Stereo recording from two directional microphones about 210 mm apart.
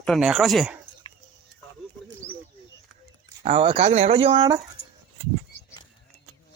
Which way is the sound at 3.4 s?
25° right (ahead or behind).